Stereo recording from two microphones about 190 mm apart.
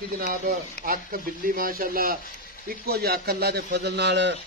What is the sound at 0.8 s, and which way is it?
Speech, 55° left (ahead or behind).